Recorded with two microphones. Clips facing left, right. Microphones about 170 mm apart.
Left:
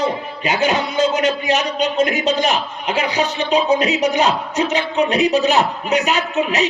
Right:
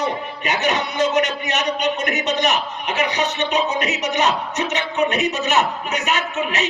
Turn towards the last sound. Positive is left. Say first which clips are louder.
# left 5 dB
turn(degrees=35)  # may be behind; listen again after turning